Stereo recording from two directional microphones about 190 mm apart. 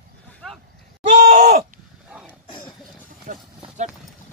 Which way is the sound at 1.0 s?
40° right (ahead or behind).